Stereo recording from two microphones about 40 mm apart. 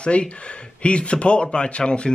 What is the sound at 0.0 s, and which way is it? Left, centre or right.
Speech, left.